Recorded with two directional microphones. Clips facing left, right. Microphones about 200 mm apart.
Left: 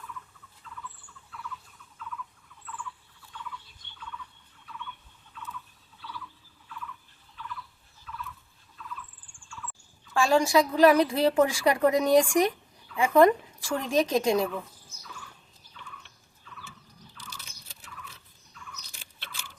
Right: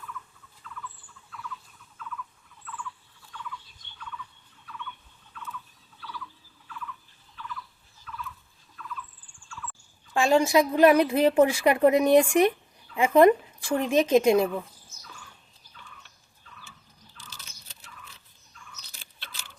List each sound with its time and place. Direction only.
10.2 s a woman's voice: 20° right (ahead or behind)